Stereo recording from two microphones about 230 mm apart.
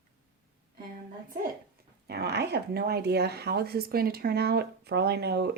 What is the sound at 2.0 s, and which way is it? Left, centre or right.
Speech, right.